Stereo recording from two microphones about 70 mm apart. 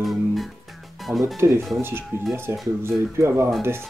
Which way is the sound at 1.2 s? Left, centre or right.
Right.